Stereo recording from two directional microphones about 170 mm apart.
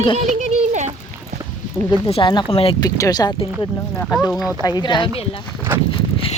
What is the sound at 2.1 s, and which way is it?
Speech, 30° left (ahead or behind).